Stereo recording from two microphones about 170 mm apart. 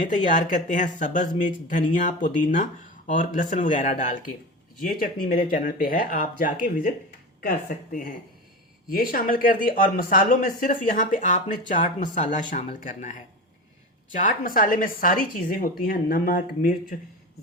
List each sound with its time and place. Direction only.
0.0 s a woman's voice: 50° left (ahead or behind)
12.8 s a woman's voice: 50° left (ahead or behind)